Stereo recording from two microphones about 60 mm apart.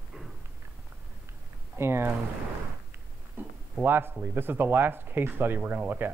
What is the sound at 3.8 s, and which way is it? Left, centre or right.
Speech, right.